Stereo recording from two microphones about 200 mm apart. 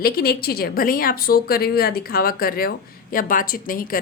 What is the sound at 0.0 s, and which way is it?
A woman's voice, 50° left (ahead or behind).